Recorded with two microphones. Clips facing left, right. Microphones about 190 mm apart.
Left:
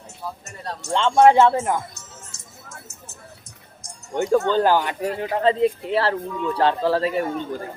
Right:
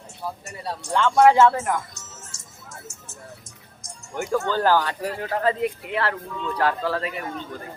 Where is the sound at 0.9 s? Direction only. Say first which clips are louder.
Left 2 dB; 25° left (ahead or behind).